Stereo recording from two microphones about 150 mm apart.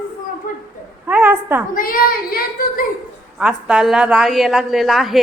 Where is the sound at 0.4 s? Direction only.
80° left.